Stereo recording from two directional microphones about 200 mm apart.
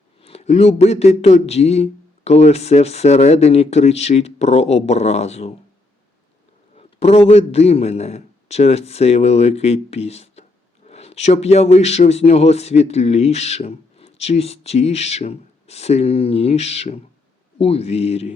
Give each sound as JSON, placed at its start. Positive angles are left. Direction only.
{"t": 0.2, "sound": "speech", "side_deg": 30}
{"t": 6.7, "sound": "speech", "side_deg": 30}